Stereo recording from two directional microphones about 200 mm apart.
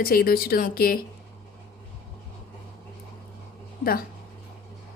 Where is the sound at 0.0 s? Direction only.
50° left (ahead or behind).